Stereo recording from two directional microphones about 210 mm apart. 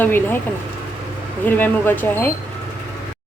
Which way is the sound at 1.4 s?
10° left (ahead or behind).